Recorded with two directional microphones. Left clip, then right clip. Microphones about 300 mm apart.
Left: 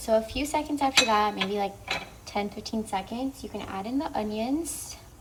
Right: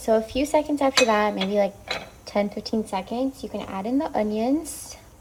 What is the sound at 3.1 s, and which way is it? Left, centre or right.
Speech, left.